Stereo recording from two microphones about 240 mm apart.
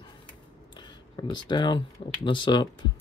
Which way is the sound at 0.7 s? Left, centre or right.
Centre.